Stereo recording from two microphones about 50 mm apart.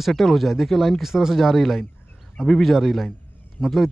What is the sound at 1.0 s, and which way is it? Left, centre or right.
Speech, centre.